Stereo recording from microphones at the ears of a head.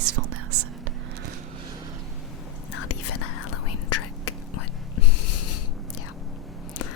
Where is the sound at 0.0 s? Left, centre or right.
Right.